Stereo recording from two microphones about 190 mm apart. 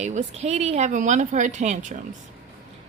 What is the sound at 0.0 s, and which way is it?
A woman's voice, 35° right (ahead or behind).